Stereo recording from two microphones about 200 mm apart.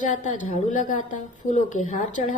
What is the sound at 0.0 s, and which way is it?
A woman's voice, 40° left (ahead or behind).